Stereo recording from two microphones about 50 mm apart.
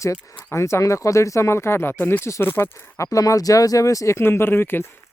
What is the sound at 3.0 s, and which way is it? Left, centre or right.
Speech, left.